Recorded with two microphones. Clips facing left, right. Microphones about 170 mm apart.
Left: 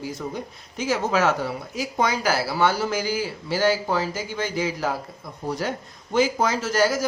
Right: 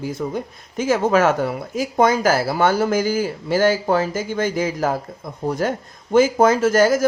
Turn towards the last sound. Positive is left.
turn(degrees=-50)  # may be behind; listen again after turning